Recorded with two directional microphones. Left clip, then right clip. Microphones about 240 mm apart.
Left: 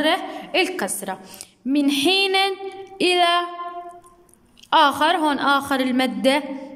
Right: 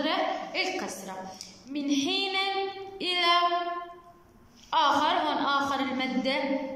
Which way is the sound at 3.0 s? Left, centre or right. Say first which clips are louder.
Left 7 dB; left.